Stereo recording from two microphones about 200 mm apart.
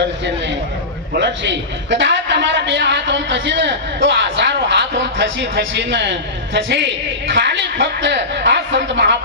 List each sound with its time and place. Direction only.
1.1 s a woman's voice: 60° right (ahead or behind)